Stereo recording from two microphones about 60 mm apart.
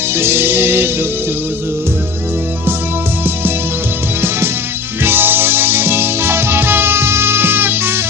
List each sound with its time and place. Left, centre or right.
0.1 s music: right
5.0 s music: right